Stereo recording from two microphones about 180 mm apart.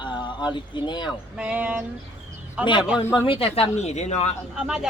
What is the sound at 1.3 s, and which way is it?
Speech, 5° right (ahead or behind).